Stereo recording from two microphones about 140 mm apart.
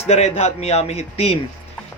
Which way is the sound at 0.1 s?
50° left (ahead or behind).